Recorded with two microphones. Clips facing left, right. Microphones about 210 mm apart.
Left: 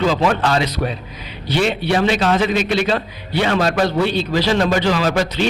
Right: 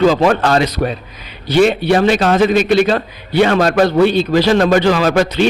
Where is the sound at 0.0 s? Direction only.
45° right (ahead or behind).